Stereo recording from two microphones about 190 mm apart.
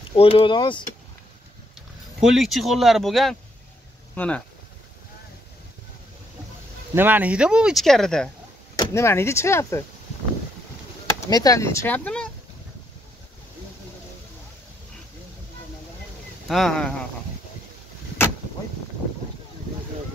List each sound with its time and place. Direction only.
0.1 s speech: 30° left (ahead or behind)
1.8 s speech: centre (ahead or behind)
7.0 s speech: 10° right (ahead or behind)
8.7 s speech: 15° left (ahead or behind)
11.1 s speech: 20° left (ahead or behind)
16.4 s speech: centre (ahead or behind)